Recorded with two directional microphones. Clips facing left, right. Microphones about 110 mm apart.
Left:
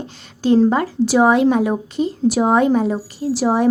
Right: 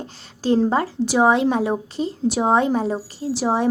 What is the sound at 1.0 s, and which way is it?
A woman's voice, 20° right (ahead or behind).